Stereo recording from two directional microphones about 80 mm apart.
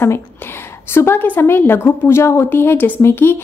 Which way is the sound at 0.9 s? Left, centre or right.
Left.